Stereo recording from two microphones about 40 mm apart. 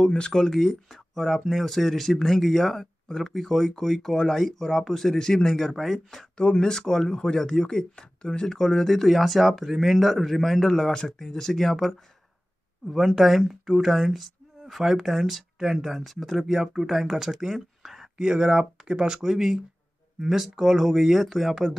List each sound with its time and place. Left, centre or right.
0.0 s speech: centre
0.6 s speech: centre
6.3 s speech: left; by 11.9 s centre
12.9 s speech: centre
17.6 s a sound: centre
18.2 s speech: centre